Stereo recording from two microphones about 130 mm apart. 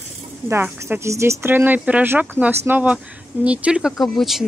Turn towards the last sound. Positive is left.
turn(degrees=0)  # may be behind; listen again after turning